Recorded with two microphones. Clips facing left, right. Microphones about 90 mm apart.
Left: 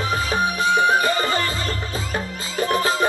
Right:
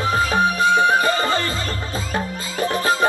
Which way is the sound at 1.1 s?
25° right (ahead or behind).